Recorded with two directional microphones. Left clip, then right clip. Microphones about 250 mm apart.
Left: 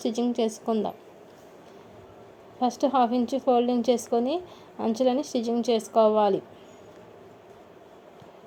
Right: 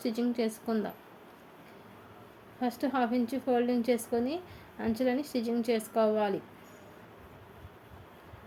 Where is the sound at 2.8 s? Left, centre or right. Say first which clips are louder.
Left 7 dB; centre.